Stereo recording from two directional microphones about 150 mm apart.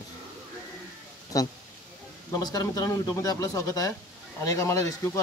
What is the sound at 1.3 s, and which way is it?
A man's voice, 25° left (ahead or behind).